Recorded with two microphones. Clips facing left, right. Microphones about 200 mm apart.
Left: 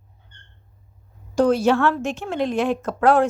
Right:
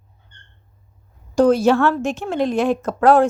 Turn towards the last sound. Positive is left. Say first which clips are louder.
# right 3 dB
turn(degrees=-40)  # may be behind; listen again after turning